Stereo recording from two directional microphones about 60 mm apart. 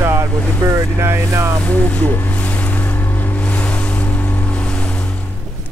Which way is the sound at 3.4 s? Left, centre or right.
Left.